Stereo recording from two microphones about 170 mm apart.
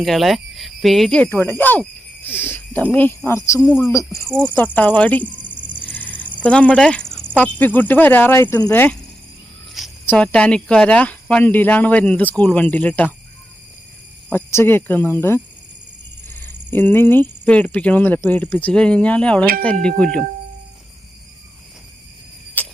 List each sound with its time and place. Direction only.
0.0 s speech: centre (ahead or behind); by 4.3 s 15° left (ahead or behind)
4.3 s speech: 15° right (ahead or behind)
4.5 s speech: 10° left (ahead or behind)
5.3 s a sound: 10° left (ahead or behind)
6.4 s speech: 5° left (ahead or behind)
9.8 s cricket: centre (ahead or behind)
10.1 s speech: 5° left (ahead or behind)
14.3 s speech: 10° left (ahead or behind)
16.3 s a sound: 10° left (ahead or behind)
16.7 s speech: 10° left (ahead or behind)
22.6 s a sound: 10° left (ahead or behind)